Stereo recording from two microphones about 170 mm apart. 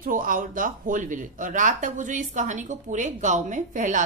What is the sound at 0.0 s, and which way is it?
Speech, 55° right (ahead or behind).